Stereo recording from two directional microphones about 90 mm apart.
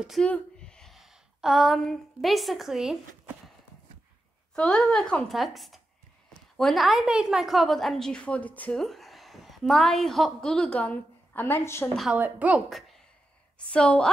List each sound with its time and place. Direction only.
0.2 s a sound: 10° left (ahead or behind)
0.9 s a woman's voice: 5° right (ahead or behind)
4.6 s a woman's voice: 5° left (ahead or behind)
8.7 s a woman's voice: centre (ahead or behind); by 11.9 s 25° left (ahead or behind)
12.1 s a woman's voice: 15° right (ahead or behind)
12.6 s a woman's voice: centre (ahead or behind)
13.7 s a woman's voice: 10° left (ahead or behind)